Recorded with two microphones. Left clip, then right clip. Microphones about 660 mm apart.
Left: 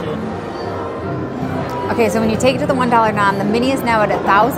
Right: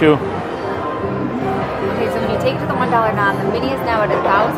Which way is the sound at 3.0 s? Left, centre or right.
Left.